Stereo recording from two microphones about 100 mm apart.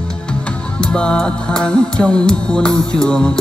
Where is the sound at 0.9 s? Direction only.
10° left (ahead or behind).